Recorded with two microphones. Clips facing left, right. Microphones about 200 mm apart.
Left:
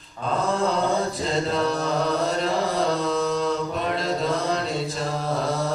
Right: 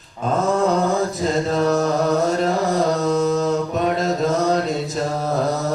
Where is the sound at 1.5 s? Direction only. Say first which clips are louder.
Right 5 dB; 45° right (ahead or behind).